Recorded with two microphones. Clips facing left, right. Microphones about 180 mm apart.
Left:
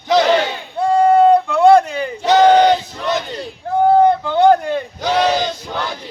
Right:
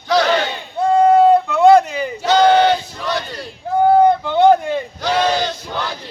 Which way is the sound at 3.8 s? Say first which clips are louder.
Even; 5° right (ahead or behind).